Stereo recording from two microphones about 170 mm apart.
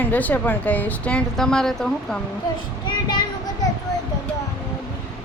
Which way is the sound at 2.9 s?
25° left (ahead or behind).